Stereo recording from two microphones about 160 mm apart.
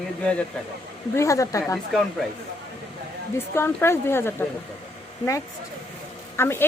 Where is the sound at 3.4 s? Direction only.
15° left (ahead or behind).